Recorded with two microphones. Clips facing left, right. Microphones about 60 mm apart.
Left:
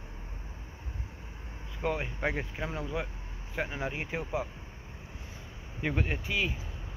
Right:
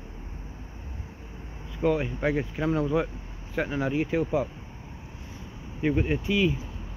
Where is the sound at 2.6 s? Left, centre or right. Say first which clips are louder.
Right 10 dB; centre.